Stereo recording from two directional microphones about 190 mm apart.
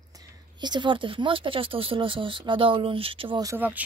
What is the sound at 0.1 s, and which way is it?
A woman's voice, 20° right (ahead or behind).